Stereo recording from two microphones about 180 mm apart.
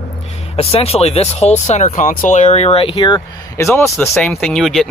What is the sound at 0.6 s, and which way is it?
Speech, 35° left (ahead or behind).